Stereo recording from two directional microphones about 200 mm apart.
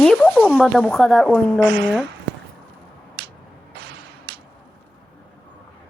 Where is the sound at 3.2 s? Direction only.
55° right (ahead or behind).